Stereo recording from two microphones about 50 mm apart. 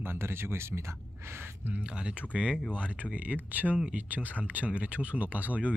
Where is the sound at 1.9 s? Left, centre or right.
Right.